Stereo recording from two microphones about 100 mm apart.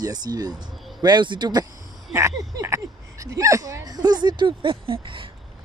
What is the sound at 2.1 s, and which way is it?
Speech, 30° right (ahead or behind).